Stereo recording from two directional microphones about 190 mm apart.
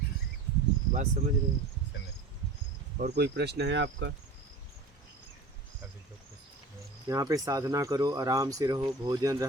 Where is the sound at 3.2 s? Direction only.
60° right (ahead or behind).